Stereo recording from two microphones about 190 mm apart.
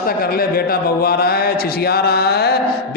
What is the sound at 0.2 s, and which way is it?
A man's voice, 55° left (ahead or behind).